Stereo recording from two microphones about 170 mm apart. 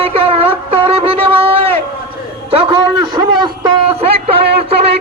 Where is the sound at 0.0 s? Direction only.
35° right (ahead or behind).